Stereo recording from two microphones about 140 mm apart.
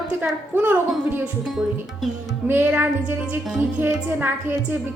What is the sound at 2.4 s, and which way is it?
A woman's voice, 15° right (ahead or behind).